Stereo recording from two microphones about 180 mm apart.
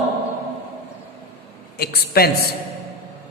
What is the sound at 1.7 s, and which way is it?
Speech, 60° left (ahead or behind).